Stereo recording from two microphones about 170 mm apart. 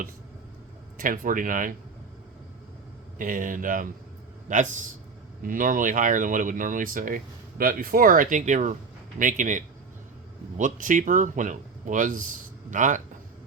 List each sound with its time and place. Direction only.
0.9 s speech: 55° right (ahead or behind)
3.2 s speech: 50° right (ahead or behind)